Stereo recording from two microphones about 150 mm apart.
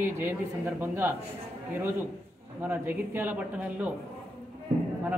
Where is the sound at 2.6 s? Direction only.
10° right (ahead or behind).